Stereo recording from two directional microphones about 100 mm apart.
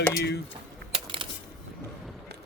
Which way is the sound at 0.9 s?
65° right (ahead or behind).